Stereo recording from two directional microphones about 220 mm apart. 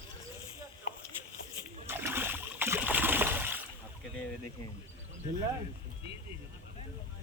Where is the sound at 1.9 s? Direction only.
10° right (ahead or behind).